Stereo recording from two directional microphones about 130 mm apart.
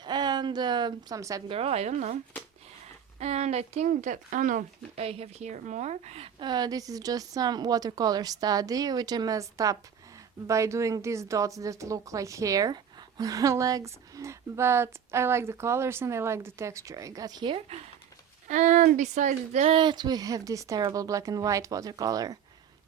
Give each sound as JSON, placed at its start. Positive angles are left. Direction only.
{"t": 0.0, "sound": "a sound", "side_deg": -35}
{"t": 1.5, "sound": "a woman's voice", "side_deg": -50}
{"t": 3.2, "sound": "speech", "side_deg": -60}
{"t": 4.9, "sound": "a woman's voice", "side_deg": -50}
{"t": 6.4, "sound": "a woman's voice", "side_deg": -35}
{"t": 18.4, "sound": "speech", "side_deg": -75}
{"t": 19.7, "sound": "a woman's voice", "side_deg": -35}